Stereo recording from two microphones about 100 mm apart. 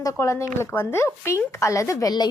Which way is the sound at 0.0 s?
30° left (ahead or behind).